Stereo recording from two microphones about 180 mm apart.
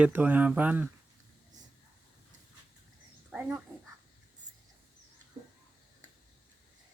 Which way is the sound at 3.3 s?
10° right (ahead or behind).